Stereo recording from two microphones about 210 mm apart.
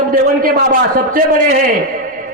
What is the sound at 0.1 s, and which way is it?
A man's voice, 40° right (ahead or behind).